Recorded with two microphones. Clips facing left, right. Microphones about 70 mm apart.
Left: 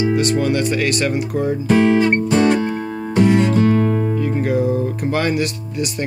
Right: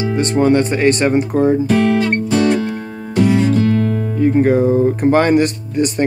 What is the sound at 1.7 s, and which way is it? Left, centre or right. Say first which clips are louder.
Music: even; centre.